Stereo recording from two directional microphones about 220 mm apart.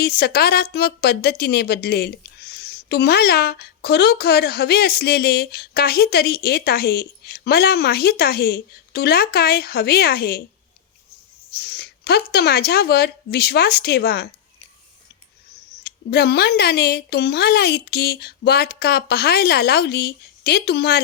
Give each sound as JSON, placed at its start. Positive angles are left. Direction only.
{"t": 0.0, "sound": "a woman's voice", "side_deg": 45}
{"t": 11.5, "sound": "a woman's voice", "side_deg": 45}
{"t": 15.7, "sound": "a woman's voice", "side_deg": 45}